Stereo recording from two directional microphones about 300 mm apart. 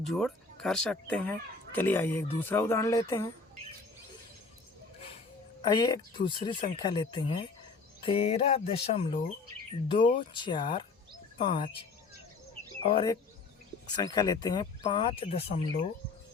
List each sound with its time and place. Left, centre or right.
0.0 s speech: centre
5.6 s speech: centre
12.8 s speech: centre